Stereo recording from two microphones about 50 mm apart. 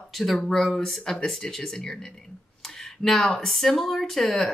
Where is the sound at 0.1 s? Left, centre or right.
Centre.